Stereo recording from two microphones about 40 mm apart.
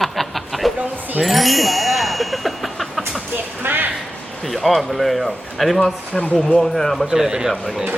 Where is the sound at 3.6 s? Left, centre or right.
Right.